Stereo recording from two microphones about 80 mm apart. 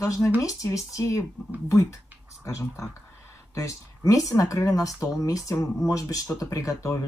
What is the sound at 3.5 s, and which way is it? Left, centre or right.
Speech, left.